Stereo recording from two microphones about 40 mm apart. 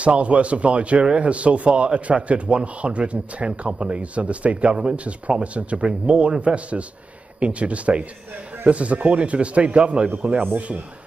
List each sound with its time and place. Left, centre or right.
0.0 s a man's voice: right